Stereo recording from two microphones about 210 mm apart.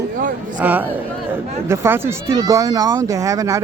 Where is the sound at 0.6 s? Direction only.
10° right (ahead or behind).